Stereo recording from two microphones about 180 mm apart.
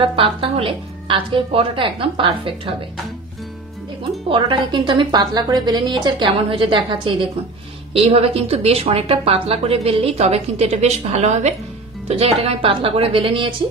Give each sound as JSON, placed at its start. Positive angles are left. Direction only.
{"t": 0.0, "sound": "a woman's voice", "side_deg": -30}
{"t": 4.3, "sound": "a woman's voice", "side_deg": -30}